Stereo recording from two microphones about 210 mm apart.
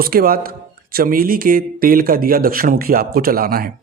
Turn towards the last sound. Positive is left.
turn(degrees=-45)  # may be behind; listen again after turning